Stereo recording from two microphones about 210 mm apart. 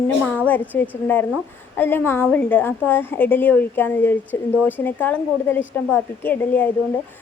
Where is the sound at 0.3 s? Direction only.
10° left (ahead or behind).